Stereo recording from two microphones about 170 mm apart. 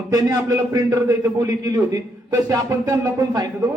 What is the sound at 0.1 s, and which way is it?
A man's voice, 20° right (ahead or behind).